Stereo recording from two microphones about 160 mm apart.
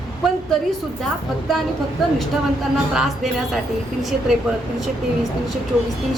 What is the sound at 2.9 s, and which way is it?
Speech, centre (ahead or behind).